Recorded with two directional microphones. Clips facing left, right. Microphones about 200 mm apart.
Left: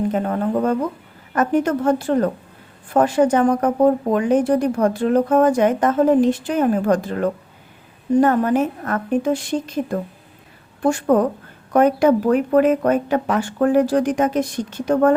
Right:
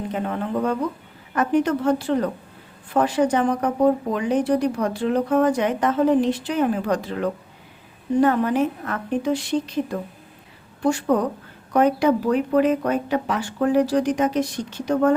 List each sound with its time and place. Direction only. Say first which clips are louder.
0.1 s speech: left 5 dB; 45° left (ahead or behind)